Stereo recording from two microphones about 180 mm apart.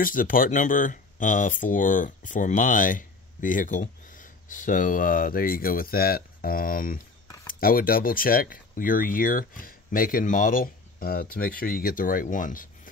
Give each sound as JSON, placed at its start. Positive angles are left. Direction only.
{"t": 0.0, "sound": "speech", "side_deg": 50}